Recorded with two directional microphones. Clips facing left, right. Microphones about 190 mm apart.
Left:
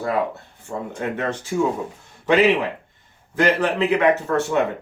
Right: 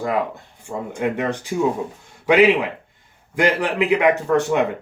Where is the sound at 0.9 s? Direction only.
15° right (ahead or behind).